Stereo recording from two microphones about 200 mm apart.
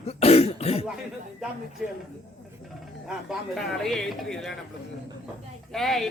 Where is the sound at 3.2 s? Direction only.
Centre (ahead or behind).